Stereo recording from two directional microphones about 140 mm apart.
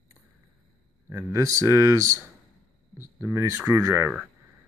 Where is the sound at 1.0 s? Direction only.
20° right (ahead or behind).